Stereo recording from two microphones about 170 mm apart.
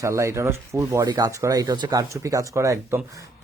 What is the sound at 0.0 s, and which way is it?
Speech, 15° right (ahead or behind).